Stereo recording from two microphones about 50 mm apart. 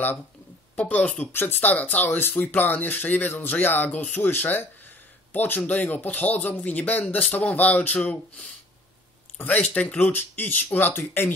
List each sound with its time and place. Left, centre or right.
0.7 s speech: left
2.0 s speech: left
4.3 s speech: left
9.9 s speech: left